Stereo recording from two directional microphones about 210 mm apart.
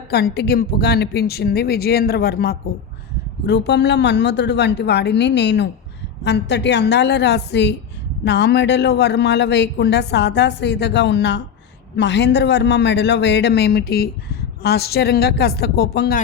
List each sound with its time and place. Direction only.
0.1 s a man's voice: 50° left (ahead or behind)